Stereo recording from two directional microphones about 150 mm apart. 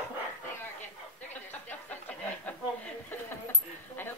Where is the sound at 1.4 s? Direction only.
10° left (ahead or behind).